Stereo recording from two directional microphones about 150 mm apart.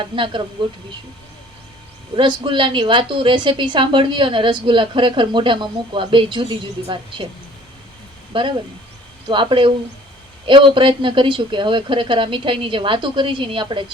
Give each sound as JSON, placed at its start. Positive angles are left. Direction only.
{"t": 0.0, "sound": "a woman's voice", "side_deg": -30}
{"t": 2.1, "sound": "a woman's voice", "side_deg": -35}
{"t": 8.3, "sound": "a woman's voice", "side_deg": -35}